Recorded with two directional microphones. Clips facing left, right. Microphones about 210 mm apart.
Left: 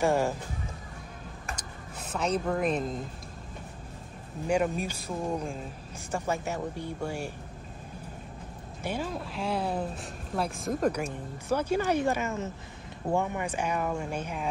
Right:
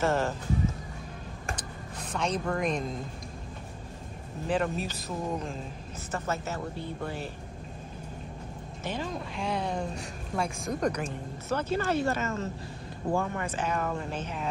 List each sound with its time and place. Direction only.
0.0 s speech: 10° left (ahead or behind)
1.5 s a sound: 10° left (ahead or behind)
4.5 s speech: 10° left (ahead or behind)
8.8 s speech: 10° left (ahead or behind)